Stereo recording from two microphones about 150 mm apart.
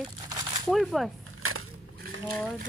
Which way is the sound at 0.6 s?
Centre (ahead or behind).